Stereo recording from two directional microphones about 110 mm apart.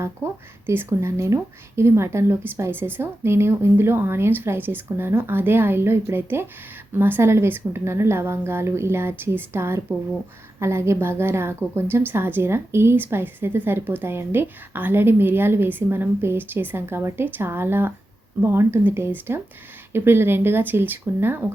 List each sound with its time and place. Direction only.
0.2 s a woman's voice: 25° right (ahead or behind)